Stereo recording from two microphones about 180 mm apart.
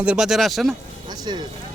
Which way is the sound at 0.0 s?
5° right (ahead or behind).